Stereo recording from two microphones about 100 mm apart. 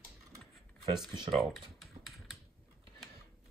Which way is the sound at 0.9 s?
Centre (ahead or behind).